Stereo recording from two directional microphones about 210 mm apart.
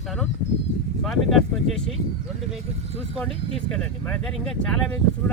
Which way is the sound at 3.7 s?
5° left (ahead or behind).